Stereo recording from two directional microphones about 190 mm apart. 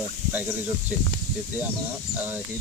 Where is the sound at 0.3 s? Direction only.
10° right (ahead or behind).